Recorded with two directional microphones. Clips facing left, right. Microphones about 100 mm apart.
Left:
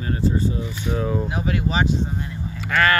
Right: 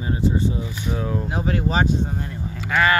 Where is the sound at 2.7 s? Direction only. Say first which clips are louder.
Even; 15° right (ahead or behind).